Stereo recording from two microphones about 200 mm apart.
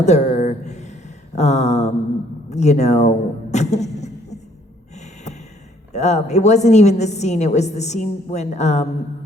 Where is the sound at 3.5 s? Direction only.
35° left (ahead or behind).